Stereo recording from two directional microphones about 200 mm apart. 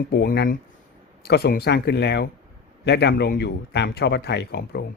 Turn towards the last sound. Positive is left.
turn(degrees=55)  # may be behind; listen again after turning